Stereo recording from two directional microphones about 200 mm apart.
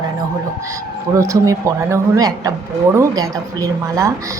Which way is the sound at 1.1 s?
15° right (ahead or behind).